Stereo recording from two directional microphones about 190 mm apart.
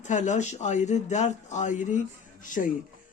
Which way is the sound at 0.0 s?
40° left (ahead or behind).